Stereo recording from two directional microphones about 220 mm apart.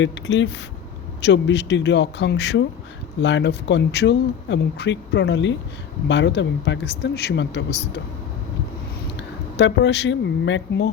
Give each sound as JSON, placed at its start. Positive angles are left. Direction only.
{"t": 0.0, "sound": "speech", "side_deg": 55}
{"t": 9.1, "sound": "speech", "side_deg": 55}